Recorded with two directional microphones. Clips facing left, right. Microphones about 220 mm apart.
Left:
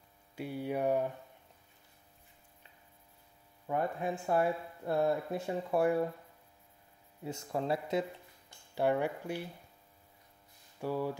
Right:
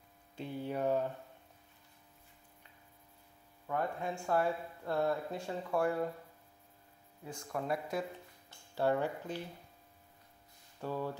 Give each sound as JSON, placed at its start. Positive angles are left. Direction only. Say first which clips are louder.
{"t": 0.4, "sound": "speech", "louder": "left 2 dB", "side_deg": 10}
{"t": 3.6, "sound": "speech", "louder": "left 3 dB", "side_deg": 20}
{"t": 7.2, "sound": "speech", "louder": "left 3 dB", "side_deg": 25}
{"t": 8.5, "sound": "speech", "louder": "left 1 dB", "side_deg": 15}
{"t": 10.8, "sound": "speech", "louder": "left 3 dB", "side_deg": 10}